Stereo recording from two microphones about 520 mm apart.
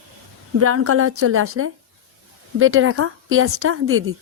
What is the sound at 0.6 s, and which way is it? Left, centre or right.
A woman's voice, right.